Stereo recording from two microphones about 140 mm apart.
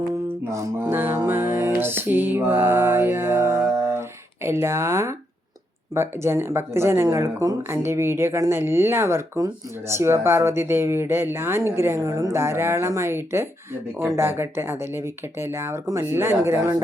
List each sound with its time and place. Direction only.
0.5 s music: 20° right (ahead or behind)
4.4 s speech: 20° right (ahead or behind)